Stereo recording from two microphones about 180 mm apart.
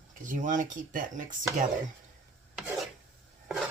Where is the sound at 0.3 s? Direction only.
45° right (ahead or behind).